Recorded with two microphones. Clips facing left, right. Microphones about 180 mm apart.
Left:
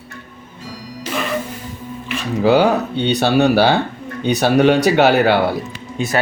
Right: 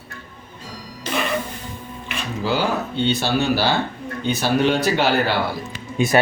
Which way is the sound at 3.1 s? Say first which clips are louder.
Left 10 dB; 65° left (ahead or behind).